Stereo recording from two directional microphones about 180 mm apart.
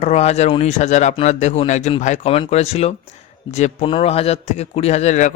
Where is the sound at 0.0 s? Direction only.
35° left (ahead or behind).